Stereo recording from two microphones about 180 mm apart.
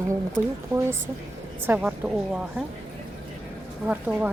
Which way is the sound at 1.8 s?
5° right (ahead or behind).